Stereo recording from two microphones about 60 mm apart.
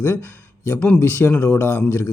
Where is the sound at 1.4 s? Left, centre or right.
Left.